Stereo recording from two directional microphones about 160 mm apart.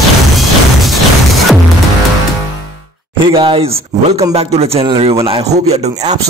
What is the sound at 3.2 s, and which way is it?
A man's voice, 30° right (ahead or behind).